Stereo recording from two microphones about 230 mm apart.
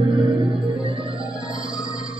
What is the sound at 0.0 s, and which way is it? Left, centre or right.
Music, right.